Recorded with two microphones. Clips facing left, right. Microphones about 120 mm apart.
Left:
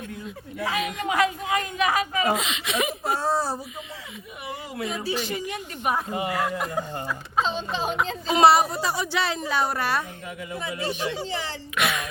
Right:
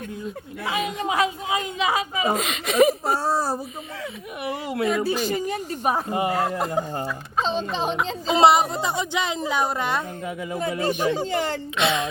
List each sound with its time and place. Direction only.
0.7 s a woman's voice: 25° right (ahead or behind)
2.3 s speech: 45° right (ahead or behind)
4.4 s speech: 65° right (ahead or behind)
5.1 s speech: 40° right (ahead or behind)
8.0 s a woman's voice: 25° right (ahead or behind)
10.5 s speech: 45° right (ahead or behind)
11.8 s a woman's voice: 25° right (ahead or behind)